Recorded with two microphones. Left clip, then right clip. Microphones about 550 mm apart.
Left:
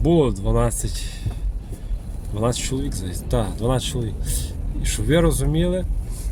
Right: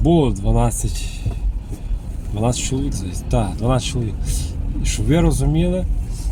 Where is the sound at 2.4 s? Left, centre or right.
Left.